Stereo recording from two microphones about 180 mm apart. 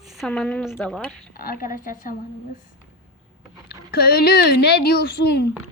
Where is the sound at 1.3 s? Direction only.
50° left (ahead or behind).